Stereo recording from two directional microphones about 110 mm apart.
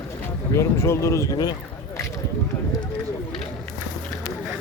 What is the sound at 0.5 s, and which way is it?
Speech, 25° left (ahead or behind).